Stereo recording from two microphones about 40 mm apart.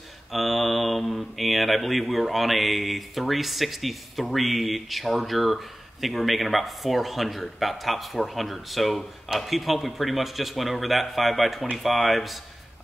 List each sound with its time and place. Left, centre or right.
0.3 s speech: centre